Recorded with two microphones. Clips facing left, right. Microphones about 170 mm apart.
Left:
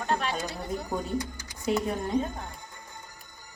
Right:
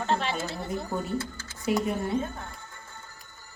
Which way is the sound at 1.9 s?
15° left (ahead or behind).